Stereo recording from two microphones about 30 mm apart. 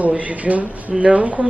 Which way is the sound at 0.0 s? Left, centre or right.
Right.